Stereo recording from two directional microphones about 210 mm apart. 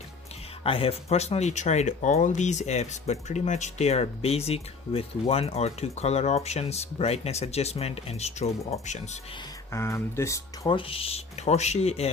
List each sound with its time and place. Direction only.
0.6 s speech: 25° left (ahead or behind)
9.7 s speech: 10° left (ahead or behind); by 12.1 s 30° left (ahead or behind)